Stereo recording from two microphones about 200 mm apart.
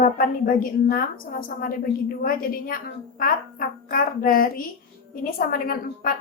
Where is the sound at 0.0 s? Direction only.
45° left (ahead or behind).